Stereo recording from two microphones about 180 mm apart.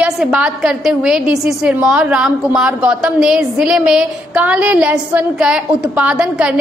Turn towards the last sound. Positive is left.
turn(degrees=-5)  # may be behind; listen again after turning